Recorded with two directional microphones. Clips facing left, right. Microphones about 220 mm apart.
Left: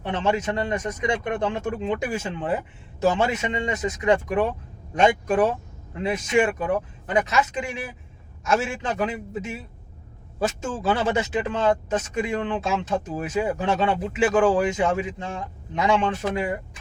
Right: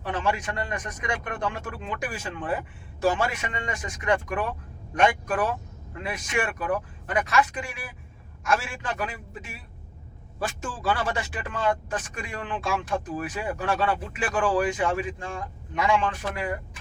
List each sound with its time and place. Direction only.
0.0 s speech: 25° left (ahead or behind)